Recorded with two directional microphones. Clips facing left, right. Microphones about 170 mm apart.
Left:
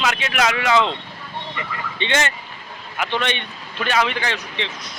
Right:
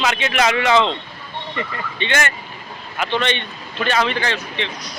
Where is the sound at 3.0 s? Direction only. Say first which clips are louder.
Right 2 dB; 10° left (ahead or behind).